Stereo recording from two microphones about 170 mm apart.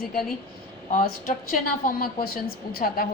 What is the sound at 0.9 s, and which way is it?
A woman's voice, 55° left (ahead or behind).